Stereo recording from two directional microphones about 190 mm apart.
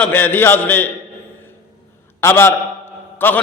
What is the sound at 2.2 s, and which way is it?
A man's voice, 10° left (ahead or behind).